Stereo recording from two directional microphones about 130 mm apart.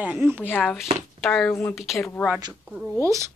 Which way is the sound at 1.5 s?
15° left (ahead or behind).